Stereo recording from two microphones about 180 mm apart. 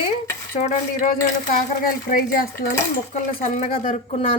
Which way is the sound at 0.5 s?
35° left (ahead or behind).